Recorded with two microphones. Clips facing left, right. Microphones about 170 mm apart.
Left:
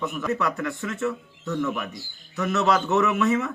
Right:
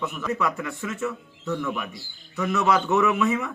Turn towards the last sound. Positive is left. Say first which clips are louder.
# even
turn(degrees=0)  # may be behind; listen again after turning